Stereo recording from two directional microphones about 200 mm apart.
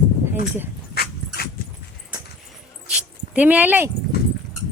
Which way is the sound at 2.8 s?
5° right (ahead or behind).